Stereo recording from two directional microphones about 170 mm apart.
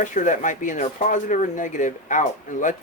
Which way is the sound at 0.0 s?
45° left (ahead or behind).